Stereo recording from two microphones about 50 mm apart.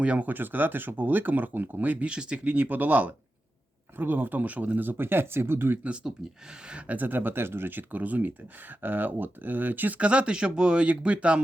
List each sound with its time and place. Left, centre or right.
0.0 s speech: right
0.3 s speech: right
2.0 s speech: centre
2.4 s speech: right
5.8 s speech: right
10.0 s speech: right